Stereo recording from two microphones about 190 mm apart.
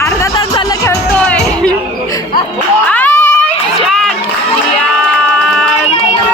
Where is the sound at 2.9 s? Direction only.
10° left (ahead or behind).